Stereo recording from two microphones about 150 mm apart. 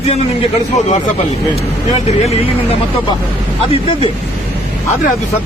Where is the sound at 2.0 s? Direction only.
45° left (ahead or behind).